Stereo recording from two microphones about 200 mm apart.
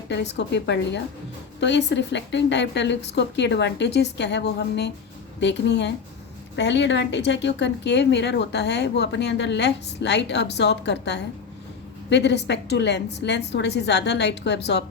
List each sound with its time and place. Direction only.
0.1 s speech: 60° left (ahead or behind)